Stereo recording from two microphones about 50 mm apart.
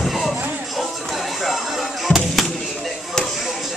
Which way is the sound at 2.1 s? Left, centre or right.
Left.